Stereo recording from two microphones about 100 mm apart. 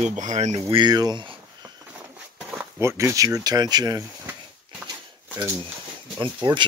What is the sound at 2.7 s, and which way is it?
Speech, 25° right (ahead or behind).